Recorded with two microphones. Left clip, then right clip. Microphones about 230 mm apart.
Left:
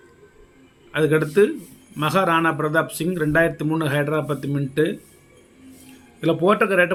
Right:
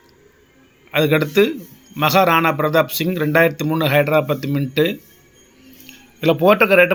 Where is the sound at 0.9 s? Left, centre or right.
Right.